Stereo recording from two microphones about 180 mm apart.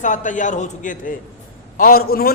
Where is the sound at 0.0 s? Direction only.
45° left (ahead or behind).